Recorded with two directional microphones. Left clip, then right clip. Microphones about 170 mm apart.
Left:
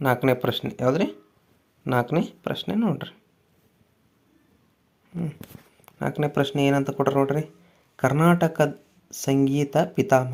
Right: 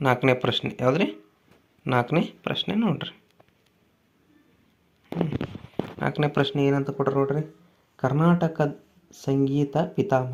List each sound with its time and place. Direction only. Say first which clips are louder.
0.0 s speech: even; 15° left (ahead or behind)
6.0 s speech: even; 15° left (ahead or behind)